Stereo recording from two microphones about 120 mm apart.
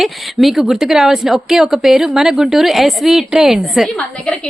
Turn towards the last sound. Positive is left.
turn(degrees=5)  # may be behind; listen again after turning